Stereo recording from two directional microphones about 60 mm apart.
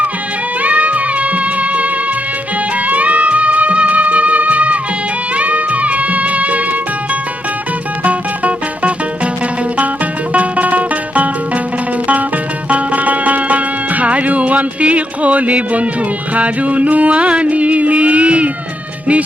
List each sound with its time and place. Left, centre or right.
0.6 s music: right
8.0 s music: right
10.3 s music: right
12.6 s music: right